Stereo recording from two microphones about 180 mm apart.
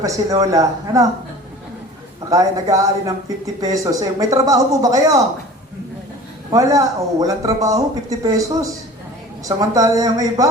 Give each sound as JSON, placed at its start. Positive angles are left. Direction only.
{"t": 0.0, "sound": "speech", "side_deg": -20}
{"t": 2.3, "sound": "speech", "side_deg": -20}
{"t": 6.5, "sound": "speech", "side_deg": -20}